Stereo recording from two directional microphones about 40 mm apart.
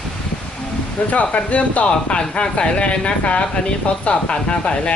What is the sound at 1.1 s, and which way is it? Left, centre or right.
Speech, left.